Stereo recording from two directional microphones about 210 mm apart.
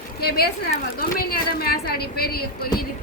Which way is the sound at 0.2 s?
50° left (ahead or behind).